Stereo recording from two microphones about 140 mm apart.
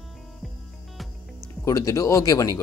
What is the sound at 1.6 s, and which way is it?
Speech, 25° left (ahead or behind).